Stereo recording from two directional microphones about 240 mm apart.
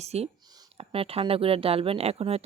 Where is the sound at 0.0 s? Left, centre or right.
Right.